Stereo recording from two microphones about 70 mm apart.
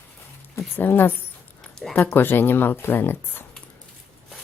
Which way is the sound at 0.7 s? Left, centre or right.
Left.